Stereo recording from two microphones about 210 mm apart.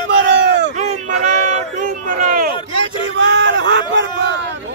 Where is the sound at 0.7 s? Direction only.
35° right (ahead or behind).